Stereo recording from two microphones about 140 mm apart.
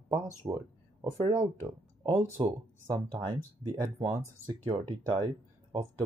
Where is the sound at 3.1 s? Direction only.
35° right (ahead or behind).